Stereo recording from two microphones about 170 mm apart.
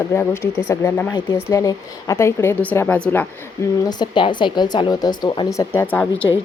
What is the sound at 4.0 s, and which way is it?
Speech, 25° left (ahead or behind).